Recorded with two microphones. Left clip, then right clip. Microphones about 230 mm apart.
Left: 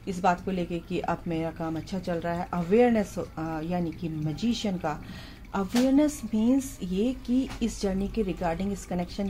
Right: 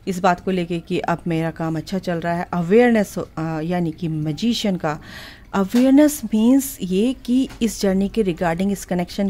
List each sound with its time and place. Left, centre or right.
0.0 s speech: right